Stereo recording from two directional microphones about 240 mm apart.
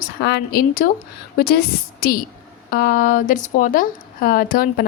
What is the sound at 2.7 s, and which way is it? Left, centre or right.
A woman's voice, left.